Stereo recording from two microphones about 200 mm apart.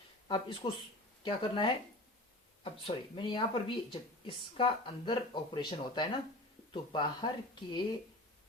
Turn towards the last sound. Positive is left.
turn(degrees=25)  # may be behind; listen again after turning